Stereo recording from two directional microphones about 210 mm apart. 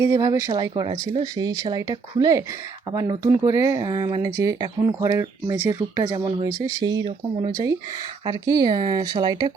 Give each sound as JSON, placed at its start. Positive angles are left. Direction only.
{"t": 0.0, "sound": "speech", "side_deg": -15}